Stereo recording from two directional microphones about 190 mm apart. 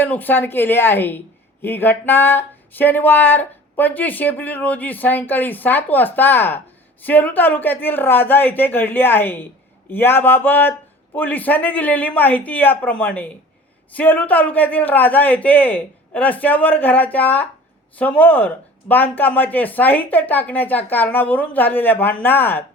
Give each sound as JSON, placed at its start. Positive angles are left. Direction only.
{"t": 0.0, "sound": "speech", "side_deg": 10}